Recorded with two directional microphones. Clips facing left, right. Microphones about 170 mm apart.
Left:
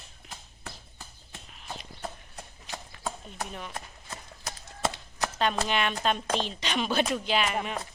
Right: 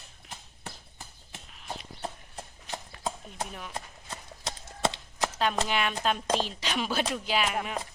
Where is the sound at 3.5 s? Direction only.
Centre (ahead or behind).